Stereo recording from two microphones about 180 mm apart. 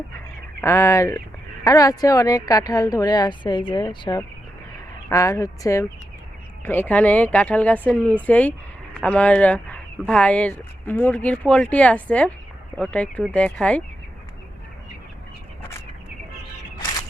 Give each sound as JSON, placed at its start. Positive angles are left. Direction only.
{"t": 0.6, "sound": "a woman's voice", "side_deg": 15}